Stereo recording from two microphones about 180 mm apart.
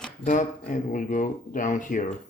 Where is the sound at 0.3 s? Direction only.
45° left (ahead or behind).